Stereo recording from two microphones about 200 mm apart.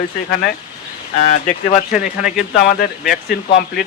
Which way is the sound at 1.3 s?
35° left (ahead or behind).